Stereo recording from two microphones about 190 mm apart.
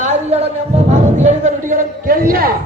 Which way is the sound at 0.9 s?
40° right (ahead or behind).